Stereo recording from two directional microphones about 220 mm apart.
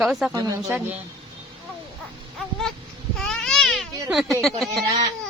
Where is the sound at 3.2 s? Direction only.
5° left (ahead or behind).